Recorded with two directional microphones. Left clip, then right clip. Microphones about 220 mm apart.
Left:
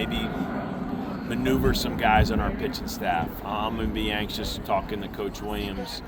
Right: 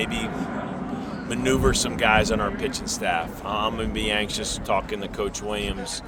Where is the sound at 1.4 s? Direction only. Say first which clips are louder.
Right 3 dB; 10° right (ahead or behind).